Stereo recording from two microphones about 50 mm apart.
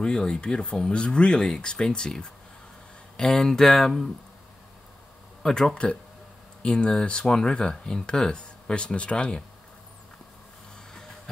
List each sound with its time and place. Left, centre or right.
0.0 s speech: centre
5.4 s speech: centre